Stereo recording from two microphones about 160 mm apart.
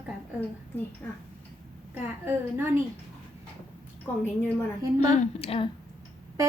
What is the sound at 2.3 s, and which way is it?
Speech, 15° right (ahead or behind).